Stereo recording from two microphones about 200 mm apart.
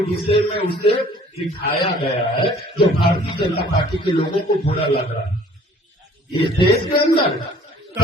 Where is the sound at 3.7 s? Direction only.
20° left (ahead or behind).